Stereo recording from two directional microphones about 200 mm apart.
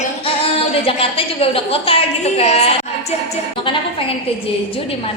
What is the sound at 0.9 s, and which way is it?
A woman's voice, 30° left (ahead or behind).